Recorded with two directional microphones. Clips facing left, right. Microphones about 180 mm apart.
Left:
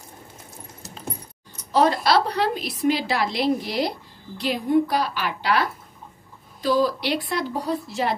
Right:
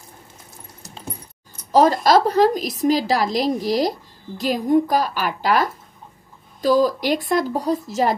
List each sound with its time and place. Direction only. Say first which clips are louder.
1.7 s a woman's voice: right 4 dB; 40° right (ahead or behind)